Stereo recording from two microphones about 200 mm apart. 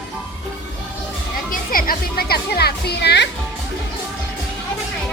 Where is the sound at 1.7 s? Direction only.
45° left (ahead or behind).